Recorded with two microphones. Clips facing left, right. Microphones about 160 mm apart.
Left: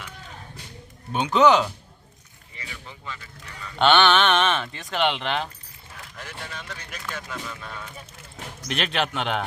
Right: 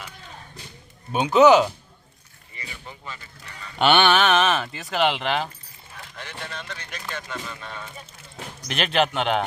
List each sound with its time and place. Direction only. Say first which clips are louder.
1.1 s speech: right 3 dB; 10° right (ahead or behind)
3.8 s speech: even; 10° right (ahead or behind)